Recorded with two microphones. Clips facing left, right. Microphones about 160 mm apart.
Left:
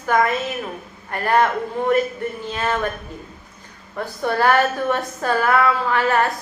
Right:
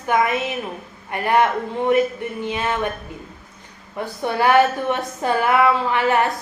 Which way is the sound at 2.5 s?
20° right (ahead or behind).